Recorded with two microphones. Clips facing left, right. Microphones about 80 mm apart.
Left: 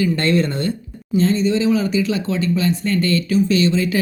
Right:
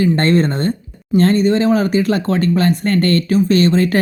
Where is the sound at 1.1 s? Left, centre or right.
Right.